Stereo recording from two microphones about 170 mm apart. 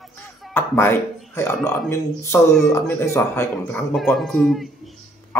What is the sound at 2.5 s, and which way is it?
Speech, centre (ahead or behind).